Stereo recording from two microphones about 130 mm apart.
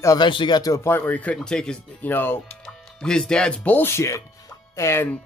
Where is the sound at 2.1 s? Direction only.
15° left (ahead or behind).